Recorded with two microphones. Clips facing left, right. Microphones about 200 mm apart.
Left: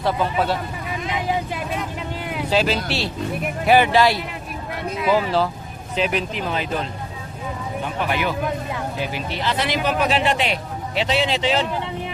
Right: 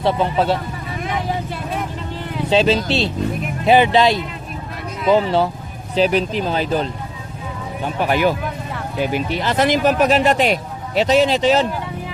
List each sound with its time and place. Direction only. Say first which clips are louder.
0.0 s speech: right 3 dB; 25° right (ahead or behind)
1.1 s speech: even; 15° left (ahead or behind)
2.5 s speech: right 5 dB; 25° right (ahead or behind)
5.0 s speech: right 4 dB; 5° left (ahead or behind)
5.9 s speech: right 6 dB; 35° right (ahead or behind)
8.0 s speech: right 6 dB; 40° right (ahead or behind)